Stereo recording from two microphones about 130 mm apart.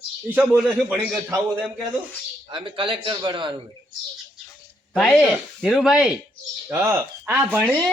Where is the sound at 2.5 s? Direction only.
40° right (ahead or behind).